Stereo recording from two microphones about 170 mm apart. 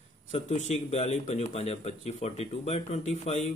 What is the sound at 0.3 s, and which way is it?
A man's voice, 40° left (ahead or behind).